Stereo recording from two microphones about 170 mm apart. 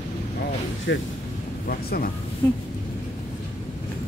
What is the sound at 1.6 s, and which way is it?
Speech, 60° left (ahead or behind).